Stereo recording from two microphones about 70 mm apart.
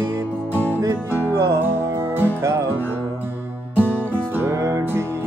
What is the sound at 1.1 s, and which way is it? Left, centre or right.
Music, right.